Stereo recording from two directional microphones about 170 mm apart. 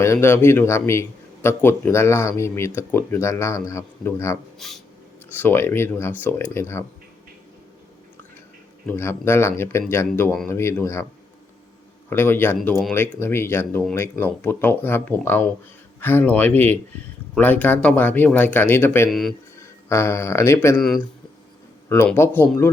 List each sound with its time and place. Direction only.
0.0 s a man's voice: 15° left (ahead or behind)
4.6 s a sound: centre (ahead or behind)
5.4 s a man's voice: 15° left (ahead or behind)
8.9 s a man's voice: 15° left (ahead or behind)
12.1 s a man's voice: 15° left (ahead or behind)
21.8 s a man's voice: 10° left (ahead or behind)